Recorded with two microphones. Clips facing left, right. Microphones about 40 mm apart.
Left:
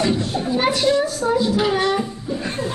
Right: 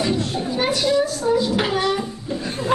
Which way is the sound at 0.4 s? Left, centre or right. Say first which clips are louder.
Left 2 dB; centre.